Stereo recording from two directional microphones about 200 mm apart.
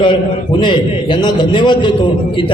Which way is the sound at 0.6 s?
20° left (ahead or behind).